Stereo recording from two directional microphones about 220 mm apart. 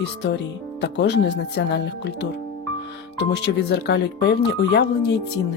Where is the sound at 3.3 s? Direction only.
50° left (ahead or behind).